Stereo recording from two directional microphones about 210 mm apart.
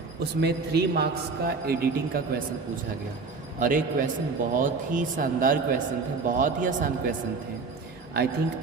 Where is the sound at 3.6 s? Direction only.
40° right (ahead or behind).